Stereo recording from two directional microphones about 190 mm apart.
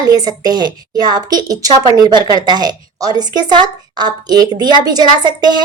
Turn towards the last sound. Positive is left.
turn(degrees=-20)  # may be behind; listen again after turning